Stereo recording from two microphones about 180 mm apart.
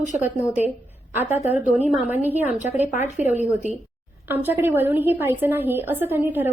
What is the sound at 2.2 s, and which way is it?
Speech, 10° right (ahead or behind).